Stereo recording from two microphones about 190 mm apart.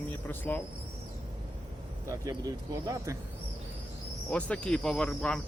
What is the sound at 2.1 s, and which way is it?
Speech, 15° right (ahead or behind).